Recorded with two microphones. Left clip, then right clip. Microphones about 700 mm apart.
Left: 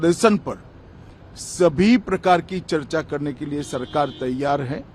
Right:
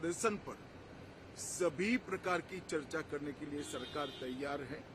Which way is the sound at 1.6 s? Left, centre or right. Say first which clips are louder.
Left 18 dB; left.